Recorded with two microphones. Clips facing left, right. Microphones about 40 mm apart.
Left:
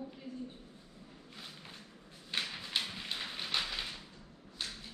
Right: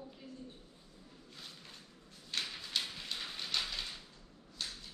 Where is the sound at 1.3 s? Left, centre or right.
Centre.